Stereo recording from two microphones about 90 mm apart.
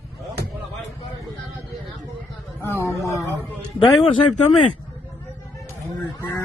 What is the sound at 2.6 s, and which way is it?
Speech, 30° left (ahead or behind).